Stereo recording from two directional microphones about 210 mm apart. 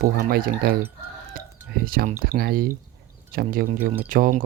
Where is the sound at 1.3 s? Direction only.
45° right (ahead or behind).